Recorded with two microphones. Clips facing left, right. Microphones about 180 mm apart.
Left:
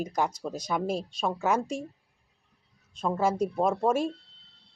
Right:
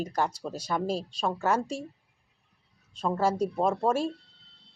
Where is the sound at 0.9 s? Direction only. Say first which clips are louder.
Even; 35° right (ahead or behind).